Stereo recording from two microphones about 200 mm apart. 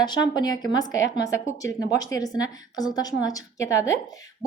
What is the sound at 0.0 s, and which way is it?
Speech, 20° left (ahead or behind).